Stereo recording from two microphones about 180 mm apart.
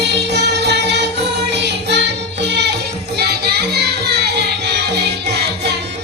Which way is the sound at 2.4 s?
70° right (ahead or behind).